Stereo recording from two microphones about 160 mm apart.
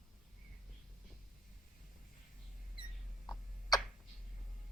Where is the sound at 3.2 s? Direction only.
25° left (ahead or behind).